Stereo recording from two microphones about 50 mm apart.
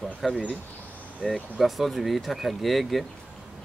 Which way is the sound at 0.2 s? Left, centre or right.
Centre.